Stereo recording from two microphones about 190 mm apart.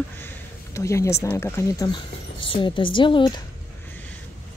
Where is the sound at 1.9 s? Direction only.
25° left (ahead or behind).